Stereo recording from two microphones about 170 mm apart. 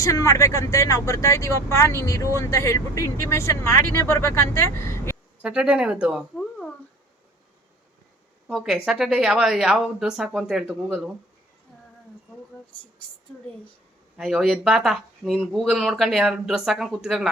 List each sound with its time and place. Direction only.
0.0 s speech: 20° left (ahead or behind)
5.4 s speech: 5° right (ahead or behind)
8.4 s speech: 5° right (ahead or behind)
14.2 s speech: 5° right (ahead or behind)